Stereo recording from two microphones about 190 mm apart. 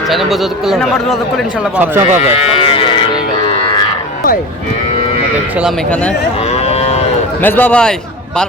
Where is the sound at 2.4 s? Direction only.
30° left (ahead or behind).